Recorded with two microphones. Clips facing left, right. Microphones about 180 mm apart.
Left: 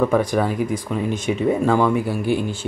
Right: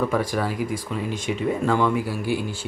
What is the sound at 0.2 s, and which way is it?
Speech, 20° left (ahead or behind).